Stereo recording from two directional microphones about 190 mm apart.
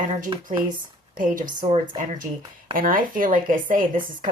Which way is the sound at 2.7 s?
45° right (ahead or behind).